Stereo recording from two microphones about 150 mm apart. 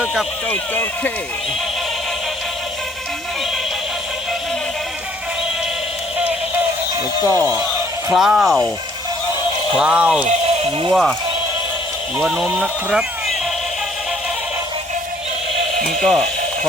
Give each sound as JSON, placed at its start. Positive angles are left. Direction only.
{"t": 0.0, "sound": "a sound", "side_deg": -5}
{"t": 0.5, "sound": "speech", "side_deg": 10}
{"t": 7.3, "sound": "speech", "side_deg": -20}
{"t": 8.1, "sound": "speech", "side_deg": 0}
{"t": 9.7, "sound": "speech", "side_deg": -5}
{"t": 10.6, "sound": "speech", "side_deg": -35}
{"t": 12.2, "sound": "speech", "side_deg": -5}
{"t": 15.9, "sound": "speech", "side_deg": 0}